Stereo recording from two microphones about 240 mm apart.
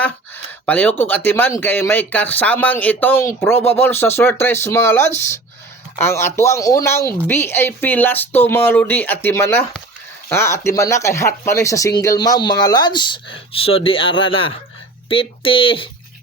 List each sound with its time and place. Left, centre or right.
0.0 s speech: centre